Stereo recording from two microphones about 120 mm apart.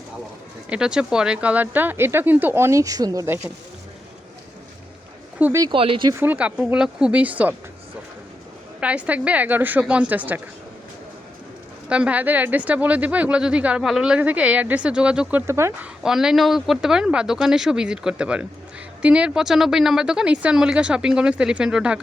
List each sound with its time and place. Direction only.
0.7 s a woman's voice: 5° right (ahead or behind); by 3.2 s 30° right (ahead or behind)
3.2 s a woman's voice: 15° right (ahead or behind)
5.4 s a woman's voice: 15° right (ahead or behind)
5.7 s speech: 50° right (ahead or behind)
6.1 s a woman's voice: 20° right (ahead or behind)
8.8 s a woman's voice: 10° right (ahead or behind)
11.9 s a woman's voice: 10° right (ahead or behind)
16.0 s a woman's voice: 5° right (ahead or behind)